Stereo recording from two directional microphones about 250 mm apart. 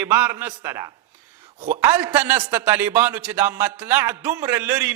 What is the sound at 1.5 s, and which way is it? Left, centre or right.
Speech, right.